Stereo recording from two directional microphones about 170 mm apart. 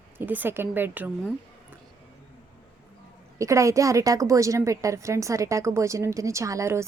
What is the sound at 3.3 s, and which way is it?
A woman's voice, 20° right (ahead or behind).